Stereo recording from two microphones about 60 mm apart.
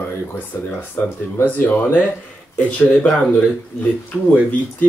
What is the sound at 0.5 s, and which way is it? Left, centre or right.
Speech, left.